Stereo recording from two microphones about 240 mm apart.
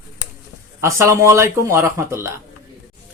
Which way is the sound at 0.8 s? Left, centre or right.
Centre.